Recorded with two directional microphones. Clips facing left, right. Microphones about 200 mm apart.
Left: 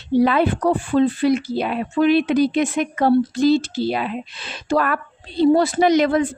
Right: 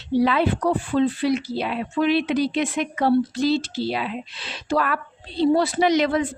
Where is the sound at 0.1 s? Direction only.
50° left (ahead or behind).